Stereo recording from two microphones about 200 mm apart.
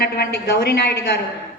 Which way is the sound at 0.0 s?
55° left (ahead or behind).